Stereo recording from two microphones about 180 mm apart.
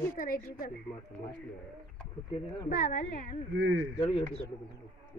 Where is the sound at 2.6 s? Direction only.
50° left (ahead or behind).